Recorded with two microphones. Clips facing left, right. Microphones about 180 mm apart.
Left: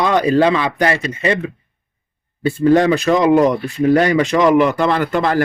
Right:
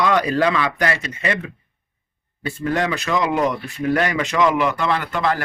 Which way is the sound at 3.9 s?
35° left (ahead or behind).